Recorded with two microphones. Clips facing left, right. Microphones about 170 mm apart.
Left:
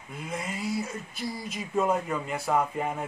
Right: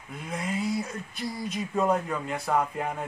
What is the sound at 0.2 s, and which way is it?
Speech, centre (ahead or behind).